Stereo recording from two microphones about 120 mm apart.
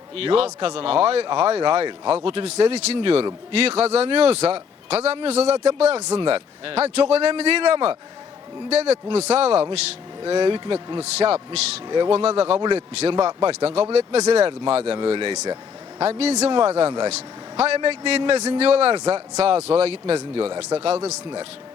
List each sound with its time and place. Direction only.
0.2 s a man's voice: 55° right (ahead or behind)
6.1 s a man's voice: 50° right (ahead or behind)
10.2 s speech: 45° right (ahead or behind)
11.0 s a man's voice: 55° right (ahead or behind)
11.9 s speech: 40° right (ahead or behind)
12.1 s a man's voice: 55° right (ahead or behind)
14.9 s speech: 40° right (ahead or behind)
16.0 s a man's voice: 55° right (ahead or behind)
20.1 s speech: 40° right (ahead or behind)